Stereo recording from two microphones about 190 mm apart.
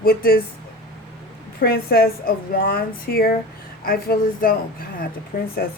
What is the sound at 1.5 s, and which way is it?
A woman's voice, 55° left (ahead or behind).